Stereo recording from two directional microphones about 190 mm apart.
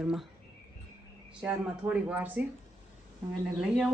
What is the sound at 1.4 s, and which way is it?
Speech, 5° right (ahead or behind).